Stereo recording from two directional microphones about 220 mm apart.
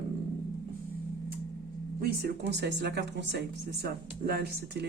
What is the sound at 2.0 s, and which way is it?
Speech, 45° right (ahead or behind).